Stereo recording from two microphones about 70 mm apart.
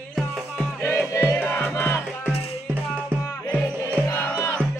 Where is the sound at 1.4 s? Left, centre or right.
Left.